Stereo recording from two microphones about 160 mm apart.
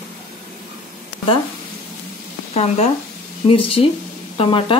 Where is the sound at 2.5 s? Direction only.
40° left (ahead or behind).